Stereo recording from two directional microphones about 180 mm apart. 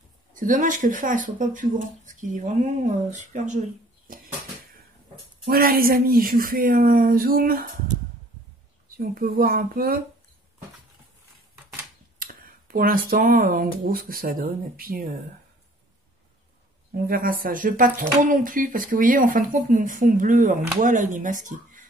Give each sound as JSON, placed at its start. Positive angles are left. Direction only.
{"t": 0.3, "sound": "speech", "side_deg": -45}
{"t": 5.5, "sound": "speech", "side_deg": -55}
{"t": 8.9, "sound": "speech", "side_deg": -50}
{"t": 12.2, "sound": "speech", "side_deg": -55}
{"t": 16.9, "sound": "speech", "side_deg": -55}